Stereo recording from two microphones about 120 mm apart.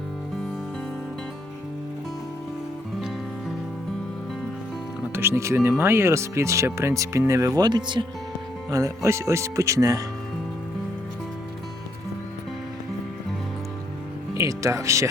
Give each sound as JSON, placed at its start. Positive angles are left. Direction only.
{"t": 5.1, "sound": "speech", "side_deg": -20}
{"t": 8.7, "sound": "speech", "side_deg": -25}
{"t": 14.3, "sound": "speech", "side_deg": -25}